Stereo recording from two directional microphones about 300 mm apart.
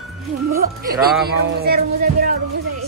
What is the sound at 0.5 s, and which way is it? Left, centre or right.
Speech, right.